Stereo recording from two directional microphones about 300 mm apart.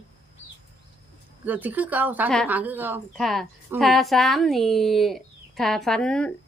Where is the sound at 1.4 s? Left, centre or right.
Centre.